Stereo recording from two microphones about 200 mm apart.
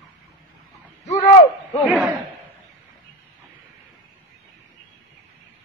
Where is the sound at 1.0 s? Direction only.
35° left (ahead or behind).